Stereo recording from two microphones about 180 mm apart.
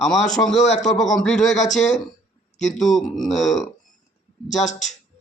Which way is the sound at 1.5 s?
40° left (ahead or behind).